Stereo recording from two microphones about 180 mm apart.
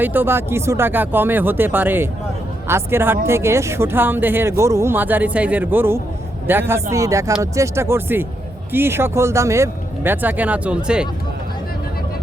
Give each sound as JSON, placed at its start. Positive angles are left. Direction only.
{"t": 0.0, "sound": "speech", "side_deg": -10}